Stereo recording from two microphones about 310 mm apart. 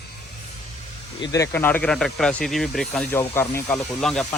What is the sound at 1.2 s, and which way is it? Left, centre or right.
Speech, centre.